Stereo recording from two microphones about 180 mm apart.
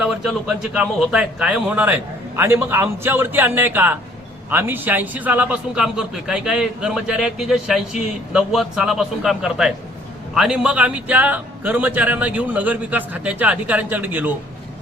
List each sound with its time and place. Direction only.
0.0 s a man's voice: 5° right (ahead or behind)